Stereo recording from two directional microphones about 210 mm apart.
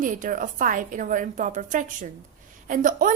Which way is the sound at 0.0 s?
40° right (ahead or behind).